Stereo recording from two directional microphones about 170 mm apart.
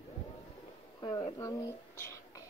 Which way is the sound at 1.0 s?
25° left (ahead or behind).